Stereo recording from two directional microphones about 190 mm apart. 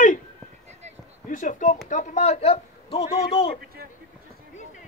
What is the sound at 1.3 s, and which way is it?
Speech, 45° left (ahead or behind).